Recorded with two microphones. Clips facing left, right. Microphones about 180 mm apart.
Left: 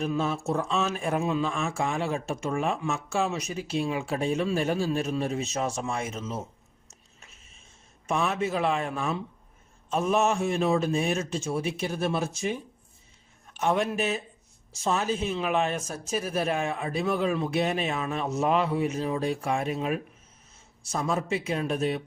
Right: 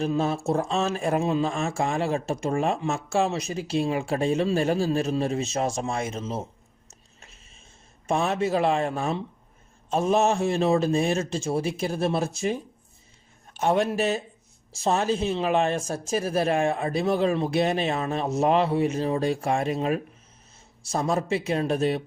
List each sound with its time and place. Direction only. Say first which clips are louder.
0.0 s speech: right 3 dB; 35° right (ahead or behind)
8.0 s speech: right 3 dB; 35° right (ahead or behind)
13.6 s speech: right 3 dB; 35° right (ahead or behind)